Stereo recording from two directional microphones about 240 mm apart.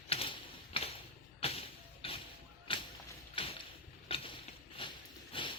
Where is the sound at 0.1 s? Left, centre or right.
Left.